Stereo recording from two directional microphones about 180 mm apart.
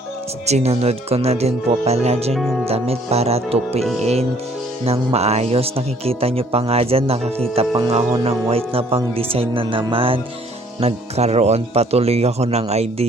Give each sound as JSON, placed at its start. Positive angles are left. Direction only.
{"t": 0.4, "sound": "speech", "side_deg": -35}
{"t": 2.3, "sound": "speech", "side_deg": 0}
{"t": 2.6, "sound": "speech", "side_deg": -35}